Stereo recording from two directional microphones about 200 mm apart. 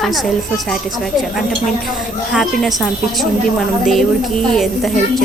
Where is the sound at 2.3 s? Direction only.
Centre (ahead or behind).